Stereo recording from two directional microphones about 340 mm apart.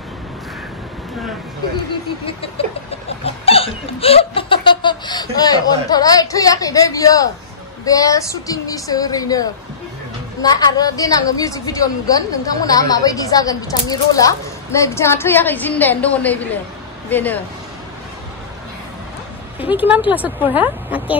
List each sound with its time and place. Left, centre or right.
1.9 s a woman's voice: centre
19.7 s a woman's voice: centre